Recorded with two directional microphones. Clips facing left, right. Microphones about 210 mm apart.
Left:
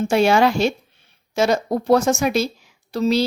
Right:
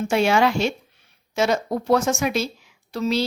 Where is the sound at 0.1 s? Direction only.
35° left (ahead or behind).